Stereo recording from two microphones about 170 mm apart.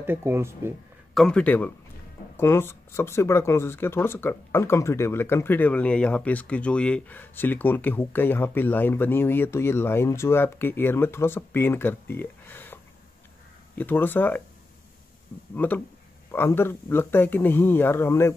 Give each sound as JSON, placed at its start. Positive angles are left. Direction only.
{"t": 0.0, "sound": "speech", "side_deg": -15}
{"t": 1.1, "sound": "speech", "side_deg": 5}
{"t": 13.7, "sound": "speech", "side_deg": 10}
{"t": 15.5, "sound": "speech", "side_deg": 10}